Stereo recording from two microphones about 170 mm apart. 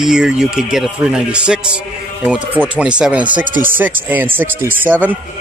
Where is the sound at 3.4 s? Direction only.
55° right (ahead or behind).